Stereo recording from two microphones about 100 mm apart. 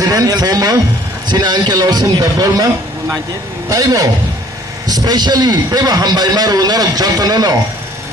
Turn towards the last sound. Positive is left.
turn(degrees=-40)  # may be behind; listen again after turning